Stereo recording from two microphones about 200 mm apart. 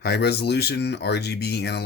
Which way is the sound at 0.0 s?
55° left (ahead or behind).